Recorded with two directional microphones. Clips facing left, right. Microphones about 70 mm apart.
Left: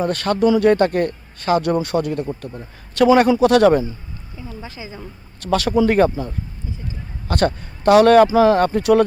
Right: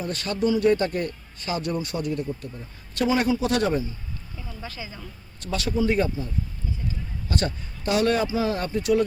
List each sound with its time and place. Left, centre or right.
0.0 s speech: left
4.4 s a sound: left
5.4 s speech: left